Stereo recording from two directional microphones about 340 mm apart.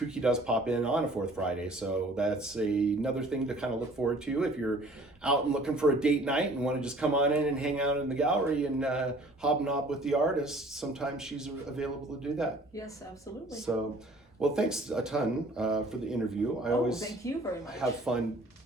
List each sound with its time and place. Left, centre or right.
0.1 s speech: centre
13.7 s speech: centre
17.2 s speech: centre
17.7 s speech: centre